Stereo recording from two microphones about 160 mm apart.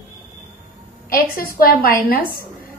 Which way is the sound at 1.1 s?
65° left (ahead or behind).